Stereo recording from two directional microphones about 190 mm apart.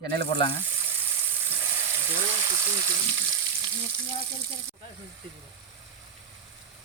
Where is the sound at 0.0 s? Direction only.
60° right (ahead or behind).